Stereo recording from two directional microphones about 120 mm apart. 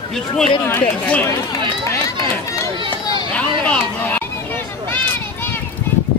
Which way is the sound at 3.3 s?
10° left (ahead or behind).